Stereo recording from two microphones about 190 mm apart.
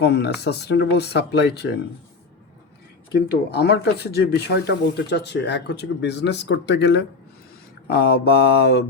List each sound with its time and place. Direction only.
0.0 s speech: 60° left (ahead or behind)
3.1 s speech: 60° left (ahead or behind)